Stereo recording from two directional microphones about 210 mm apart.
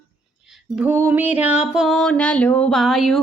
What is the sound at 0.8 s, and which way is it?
Music, 10° right (ahead or behind).